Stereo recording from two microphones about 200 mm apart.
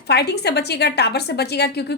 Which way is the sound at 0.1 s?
55° left (ahead or behind).